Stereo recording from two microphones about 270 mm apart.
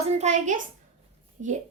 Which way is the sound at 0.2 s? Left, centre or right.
Right.